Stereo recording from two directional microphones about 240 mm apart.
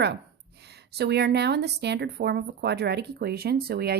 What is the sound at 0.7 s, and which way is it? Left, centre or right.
A woman's voice, right.